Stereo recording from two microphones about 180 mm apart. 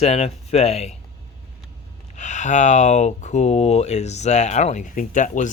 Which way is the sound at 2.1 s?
40° left (ahead or behind).